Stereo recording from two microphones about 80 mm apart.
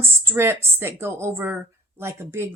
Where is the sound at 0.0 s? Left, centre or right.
Right.